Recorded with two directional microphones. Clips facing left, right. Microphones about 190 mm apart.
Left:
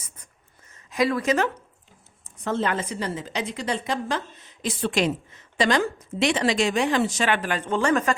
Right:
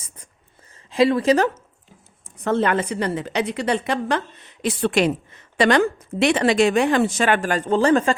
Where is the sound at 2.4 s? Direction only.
60° right (ahead or behind); by 8.1 s 30° right (ahead or behind).